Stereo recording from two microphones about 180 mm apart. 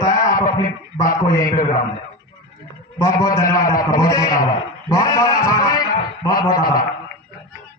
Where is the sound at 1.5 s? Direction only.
45° left (ahead or behind).